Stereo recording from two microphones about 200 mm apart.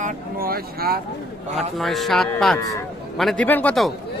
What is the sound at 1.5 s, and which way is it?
A man's voice, centre (ahead or behind).